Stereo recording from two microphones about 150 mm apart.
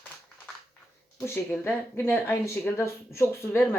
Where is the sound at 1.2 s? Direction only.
15° left (ahead or behind).